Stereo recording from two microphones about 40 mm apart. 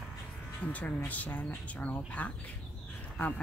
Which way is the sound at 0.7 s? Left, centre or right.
Left.